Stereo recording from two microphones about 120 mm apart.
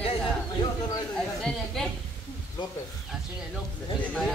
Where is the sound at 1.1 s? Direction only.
5° left (ahead or behind).